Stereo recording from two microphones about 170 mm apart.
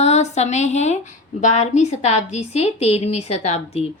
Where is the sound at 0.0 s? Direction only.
40° left (ahead or behind).